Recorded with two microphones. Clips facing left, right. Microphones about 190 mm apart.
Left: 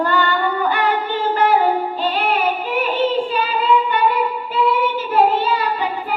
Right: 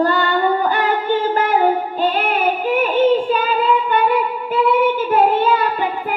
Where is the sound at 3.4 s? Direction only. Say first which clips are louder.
Even; 50° right (ahead or behind).